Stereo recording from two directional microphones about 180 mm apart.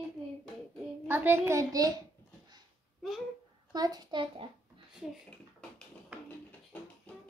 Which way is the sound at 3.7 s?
20° right (ahead or behind).